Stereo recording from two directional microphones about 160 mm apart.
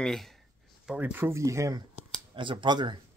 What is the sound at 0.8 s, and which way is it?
Speech, 10° right (ahead or behind).